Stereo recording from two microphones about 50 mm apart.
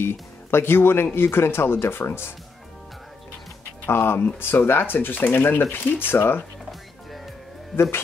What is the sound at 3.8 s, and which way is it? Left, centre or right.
Speech, left.